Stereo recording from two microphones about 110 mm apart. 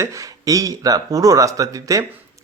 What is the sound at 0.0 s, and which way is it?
Speech, 30° right (ahead or behind).